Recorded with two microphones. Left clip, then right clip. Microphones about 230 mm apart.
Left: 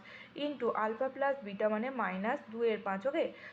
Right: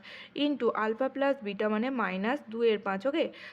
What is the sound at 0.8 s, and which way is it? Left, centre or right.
A woman's voice, right.